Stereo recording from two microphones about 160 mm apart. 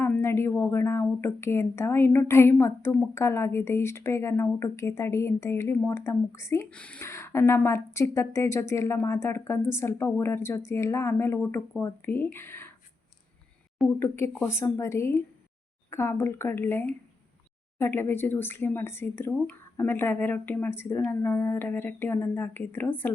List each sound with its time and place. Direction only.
0.0 s a woman's voice: 15° left (ahead or behind)
13.8 s a woman's voice: 10° left (ahead or behind)